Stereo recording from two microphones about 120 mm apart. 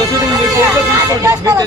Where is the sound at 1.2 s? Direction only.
25° right (ahead or behind).